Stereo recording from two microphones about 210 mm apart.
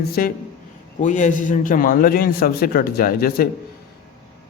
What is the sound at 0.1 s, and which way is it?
A man's voice, 45° left (ahead or behind).